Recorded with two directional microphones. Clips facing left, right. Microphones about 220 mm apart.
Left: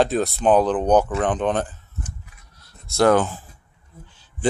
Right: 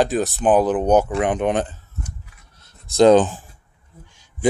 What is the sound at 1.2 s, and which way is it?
Scissors, 10° right (ahead or behind).